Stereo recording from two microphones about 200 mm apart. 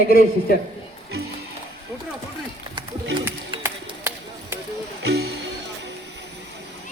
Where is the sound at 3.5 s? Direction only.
25° right (ahead or behind).